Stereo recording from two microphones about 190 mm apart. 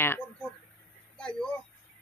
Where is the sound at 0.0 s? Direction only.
10° left (ahead or behind).